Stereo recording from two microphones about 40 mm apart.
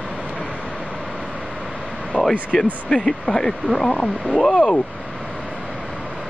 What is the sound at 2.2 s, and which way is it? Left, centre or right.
Vehicle, centre.